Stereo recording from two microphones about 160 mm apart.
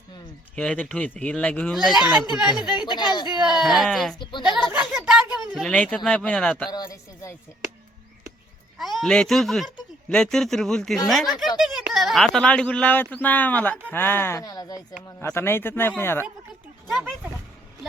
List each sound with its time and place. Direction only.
0.5 s speech: 5° left (ahead or behind)
2.6 s speech: 25° left (ahead or behind)
3.5 s speech: centre (ahead or behind)
4.2 s speech: 30° left (ahead or behind)
5.0 s speech: centre (ahead or behind)
6.7 s a man's voice: 25° left (ahead or behind)
8.8 s speech: centre (ahead or behind)